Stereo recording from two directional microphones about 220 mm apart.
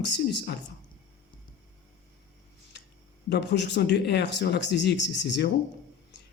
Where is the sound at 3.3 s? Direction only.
50° left (ahead or behind).